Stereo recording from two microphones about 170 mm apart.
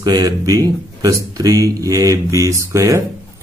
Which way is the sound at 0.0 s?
25° right (ahead or behind).